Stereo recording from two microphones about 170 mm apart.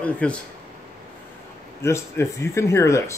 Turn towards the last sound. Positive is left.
turn(degrees=15)  # may be behind; listen again after turning